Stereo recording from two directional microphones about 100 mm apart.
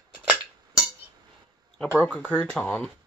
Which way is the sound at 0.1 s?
10° right (ahead or behind).